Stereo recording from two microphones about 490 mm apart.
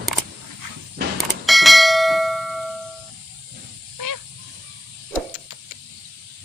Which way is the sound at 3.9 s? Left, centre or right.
Right.